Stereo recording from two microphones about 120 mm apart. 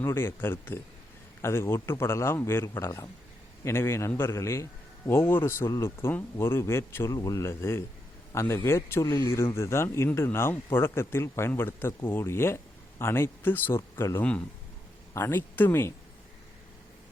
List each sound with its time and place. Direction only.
0.0 s a man's voice: 20° left (ahead or behind)